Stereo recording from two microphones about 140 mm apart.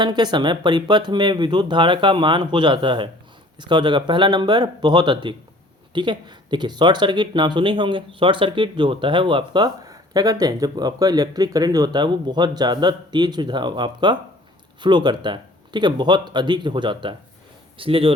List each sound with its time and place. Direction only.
0.0 s speech: 30° right (ahead or behind)